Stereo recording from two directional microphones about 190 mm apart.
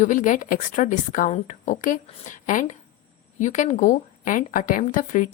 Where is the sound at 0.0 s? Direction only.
40° left (ahead or behind).